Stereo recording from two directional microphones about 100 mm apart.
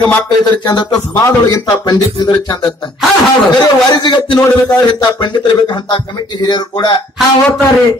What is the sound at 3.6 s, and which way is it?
Speech, 45° left (ahead or behind).